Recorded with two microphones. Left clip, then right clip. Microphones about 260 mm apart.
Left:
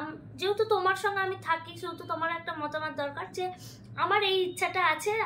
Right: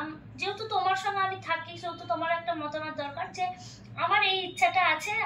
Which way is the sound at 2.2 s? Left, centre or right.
Centre.